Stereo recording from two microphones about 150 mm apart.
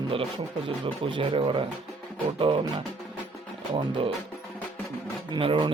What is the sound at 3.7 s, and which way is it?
Speech, 35° right (ahead or behind).